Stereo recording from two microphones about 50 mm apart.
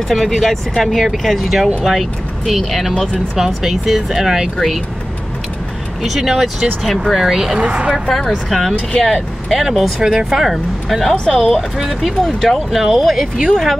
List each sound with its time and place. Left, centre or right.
0.1 s speech: centre
4.6 s speech: centre
6.0 s speech: centre
7.5 s speech: right
7.9 s speech: centre
9.6 s speech: centre
11.2 s speech: centre
11.5 s speech: centre